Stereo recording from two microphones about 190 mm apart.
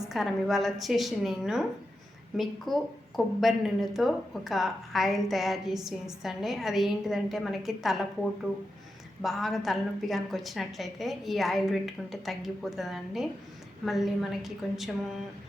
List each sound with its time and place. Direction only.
0.0 s speech: centre (ahead or behind)
9.2 s speech: centre (ahead or behind)